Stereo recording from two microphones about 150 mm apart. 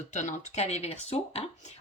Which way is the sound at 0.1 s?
50° left (ahead or behind).